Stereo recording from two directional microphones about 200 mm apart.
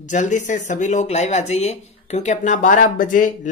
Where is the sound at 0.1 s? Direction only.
40° left (ahead or behind).